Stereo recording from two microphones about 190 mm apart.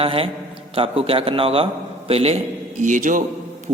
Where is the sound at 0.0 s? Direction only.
30° right (ahead or behind).